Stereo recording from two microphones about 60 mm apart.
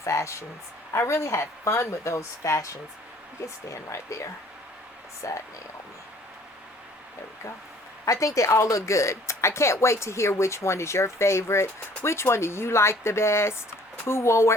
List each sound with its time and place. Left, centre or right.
0.0 s speech: left
8.0 s speech: left